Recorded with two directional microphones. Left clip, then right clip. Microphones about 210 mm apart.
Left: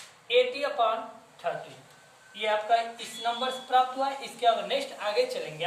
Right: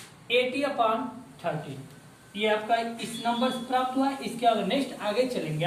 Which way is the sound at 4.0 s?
15° left (ahead or behind).